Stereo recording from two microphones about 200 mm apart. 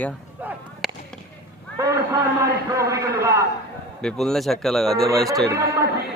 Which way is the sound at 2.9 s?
15° right (ahead or behind).